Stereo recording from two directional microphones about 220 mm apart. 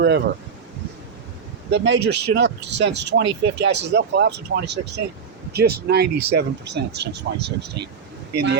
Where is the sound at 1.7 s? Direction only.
50° right (ahead or behind).